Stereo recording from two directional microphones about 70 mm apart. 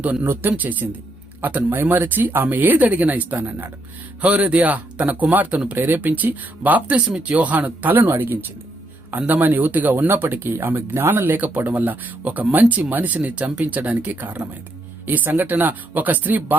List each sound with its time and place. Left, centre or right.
0.0 s speech: right